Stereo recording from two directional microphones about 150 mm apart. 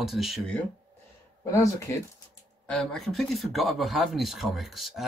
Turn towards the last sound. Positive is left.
turn(degrees=0)  # may be behind; listen again after turning